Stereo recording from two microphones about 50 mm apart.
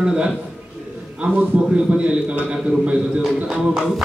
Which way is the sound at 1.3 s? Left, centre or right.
Right.